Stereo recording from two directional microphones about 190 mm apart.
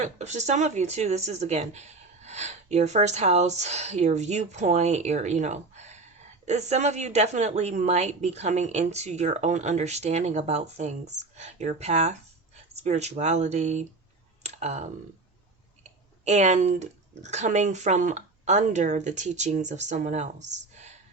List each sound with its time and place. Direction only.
0.0 s speech: 35° right (ahead or behind)
14.4 s clicking: 35° right (ahead or behind)
15.8 s speech: 40° right (ahead or behind)